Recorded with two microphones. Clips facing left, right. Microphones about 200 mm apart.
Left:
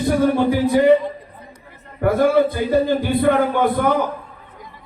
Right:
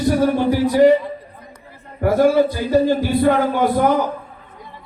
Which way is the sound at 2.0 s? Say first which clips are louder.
Right 1 dB; 55° left (ahead or behind).